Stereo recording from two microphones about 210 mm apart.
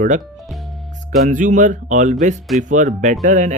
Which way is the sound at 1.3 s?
35° right (ahead or behind).